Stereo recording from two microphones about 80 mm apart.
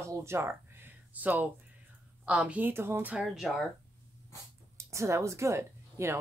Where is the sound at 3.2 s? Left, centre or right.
Centre.